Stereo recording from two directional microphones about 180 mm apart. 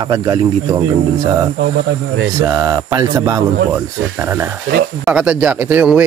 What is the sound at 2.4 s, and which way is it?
Speech, 20° right (ahead or behind).